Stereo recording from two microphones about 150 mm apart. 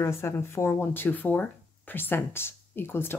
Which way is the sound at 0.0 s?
15° left (ahead or behind).